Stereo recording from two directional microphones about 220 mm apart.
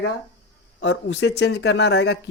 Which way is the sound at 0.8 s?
55° left (ahead or behind).